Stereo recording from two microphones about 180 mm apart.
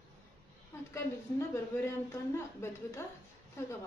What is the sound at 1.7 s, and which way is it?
A woman's voice, 15° left (ahead or behind).